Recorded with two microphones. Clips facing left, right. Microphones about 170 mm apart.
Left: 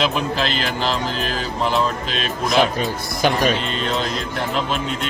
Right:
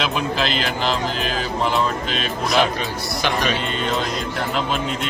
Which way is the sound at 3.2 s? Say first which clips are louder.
Left 4 dB; 45° left (ahead or behind).